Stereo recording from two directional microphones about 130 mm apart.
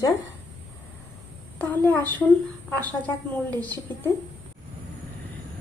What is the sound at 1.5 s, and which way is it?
A woman's voice, 15° left (ahead or behind).